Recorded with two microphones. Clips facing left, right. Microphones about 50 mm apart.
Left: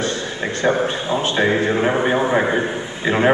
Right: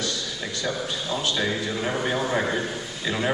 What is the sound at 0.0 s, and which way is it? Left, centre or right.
A man's voice, left.